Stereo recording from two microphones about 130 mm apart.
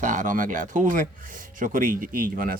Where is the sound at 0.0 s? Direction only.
80° right.